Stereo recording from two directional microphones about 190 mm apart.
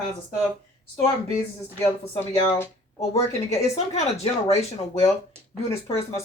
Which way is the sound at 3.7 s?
35° left (ahead or behind).